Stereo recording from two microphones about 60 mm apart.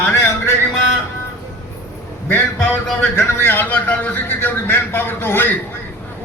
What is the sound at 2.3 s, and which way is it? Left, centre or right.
A man's voice, left.